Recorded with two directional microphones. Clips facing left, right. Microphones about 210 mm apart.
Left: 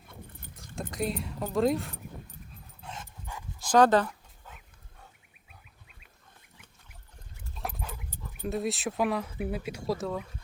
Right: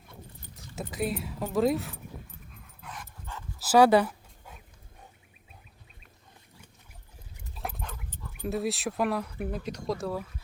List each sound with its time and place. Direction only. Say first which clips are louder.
0.8 s speech: right 1 dB; 5° right (ahead or behind)
2.8 s dog: left 1 dB; 25° left (ahead or behind)
3.3 s dog: even; 15° left (ahead or behind)
3.6 s dog: right 2 dB; 10° right (ahead or behind)
7.5 s dog: even; 5° right (ahead or behind)
7.8 s dog: left 1 dB; 5° left (ahead or behind)
8.4 s speech: right 1 dB; centre (ahead or behind)